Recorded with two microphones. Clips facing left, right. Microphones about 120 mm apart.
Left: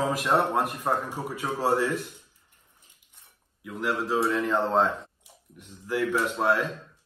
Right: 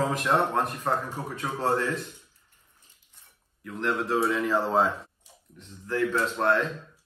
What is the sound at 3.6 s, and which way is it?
A man's voice, 5° left (ahead or behind).